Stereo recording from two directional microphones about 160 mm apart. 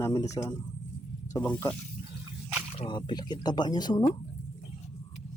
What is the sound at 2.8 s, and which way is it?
Speech, 30° left (ahead or behind).